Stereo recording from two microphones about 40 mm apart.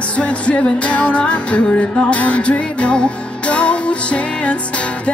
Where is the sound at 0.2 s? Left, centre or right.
Left.